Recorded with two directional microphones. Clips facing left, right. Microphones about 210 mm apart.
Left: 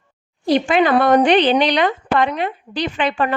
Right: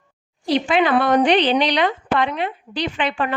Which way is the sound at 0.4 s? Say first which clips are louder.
Left 3 dB; 45° left (ahead or behind).